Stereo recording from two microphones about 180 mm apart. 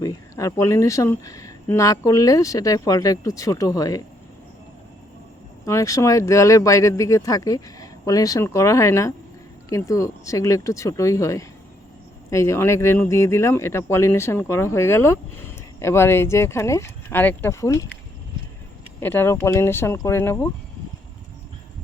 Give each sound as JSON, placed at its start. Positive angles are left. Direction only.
{"t": 0.0, "sound": "speech", "side_deg": 20}
{"t": 5.6, "sound": "speech", "side_deg": 15}
{"t": 18.9, "sound": "speech", "side_deg": 10}